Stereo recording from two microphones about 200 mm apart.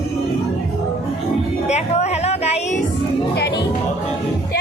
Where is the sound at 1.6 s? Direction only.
35° left (ahead or behind).